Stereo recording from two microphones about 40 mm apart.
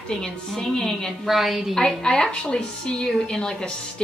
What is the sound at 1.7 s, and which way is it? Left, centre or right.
A woman's voice, centre.